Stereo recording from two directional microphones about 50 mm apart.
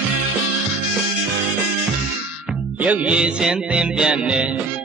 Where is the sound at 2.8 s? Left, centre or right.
Right.